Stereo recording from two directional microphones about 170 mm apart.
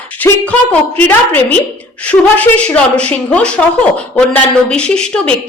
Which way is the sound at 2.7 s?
5° left (ahead or behind).